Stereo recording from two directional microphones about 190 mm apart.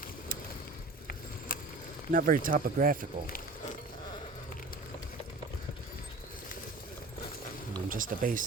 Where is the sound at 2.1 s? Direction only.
45° right (ahead or behind).